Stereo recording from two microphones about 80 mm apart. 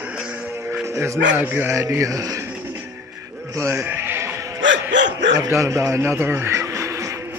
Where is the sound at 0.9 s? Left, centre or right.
Right.